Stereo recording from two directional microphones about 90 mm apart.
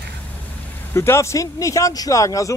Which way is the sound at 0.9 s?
30° left (ahead or behind).